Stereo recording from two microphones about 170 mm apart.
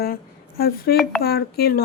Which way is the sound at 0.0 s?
65° left (ahead or behind).